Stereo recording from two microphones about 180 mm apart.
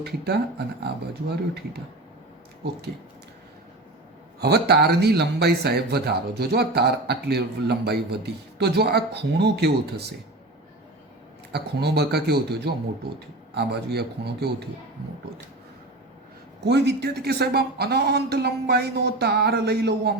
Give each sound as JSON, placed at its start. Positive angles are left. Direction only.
{"t": 1.3, "sound": "a man's voice", "side_deg": -65}
{"t": 4.4, "sound": "a man's voice", "side_deg": -65}
{"t": 11.5, "sound": "a man's voice", "side_deg": -65}
{"t": 16.6, "sound": "a man's voice", "side_deg": -70}